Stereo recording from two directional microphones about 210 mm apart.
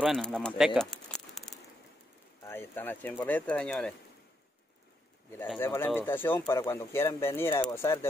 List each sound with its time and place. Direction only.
0.0 s speech: 5° left (ahead or behind)
2.4 s speech: 10° left (ahead or behind)
5.6 s speech: 10° left (ahead or behind)